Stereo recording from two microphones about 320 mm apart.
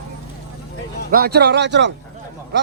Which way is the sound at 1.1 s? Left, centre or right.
Right.